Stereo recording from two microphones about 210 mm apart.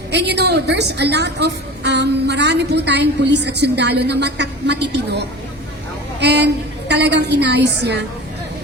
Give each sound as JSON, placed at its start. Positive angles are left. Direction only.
{"t": 0.1, "sound": "a woman's voice", "side_deg": -55}